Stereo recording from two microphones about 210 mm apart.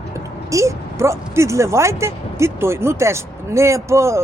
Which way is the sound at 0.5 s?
15° right (ahead or behind).